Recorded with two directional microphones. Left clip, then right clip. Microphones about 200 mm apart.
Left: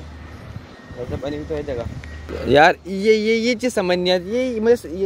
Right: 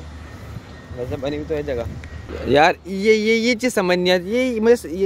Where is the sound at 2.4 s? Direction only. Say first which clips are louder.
Left 2 dB; 5° left (ahead or behind).